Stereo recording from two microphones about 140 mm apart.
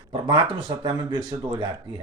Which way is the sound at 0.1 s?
35° right (ahead or behind).